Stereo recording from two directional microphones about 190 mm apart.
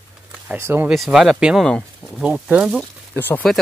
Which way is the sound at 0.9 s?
Centre (ahead or behind).